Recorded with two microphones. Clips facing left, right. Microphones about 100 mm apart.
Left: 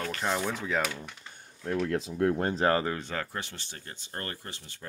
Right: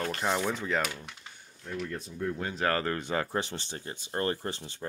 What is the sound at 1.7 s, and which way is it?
Speech, 85° left.